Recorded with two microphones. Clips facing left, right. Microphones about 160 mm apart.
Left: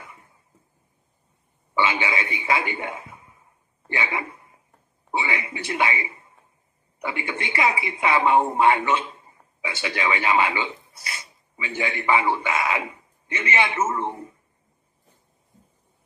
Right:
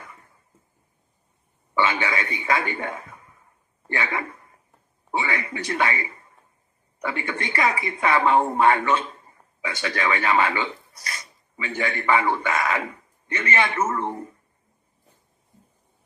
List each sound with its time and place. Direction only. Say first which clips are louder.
0.0 s a sound: even; 15° left (ahead or behind)
1.8 s a man's voice: even; 15° left (ahead or behind)
11.1 s a sound: even; 10° left (ahead or behind)
11.7 s a man's voice: right 1 dB; 25° left (ahead or behind)
12.0 s a man's voice: even; 10° left (ahead or behind)
13.8 s speech: even; 25° left (ahead or behind)